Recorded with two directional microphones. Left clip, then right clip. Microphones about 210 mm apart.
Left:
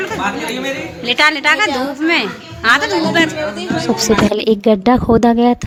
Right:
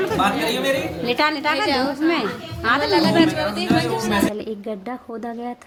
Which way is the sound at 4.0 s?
45° left (ahead or behind).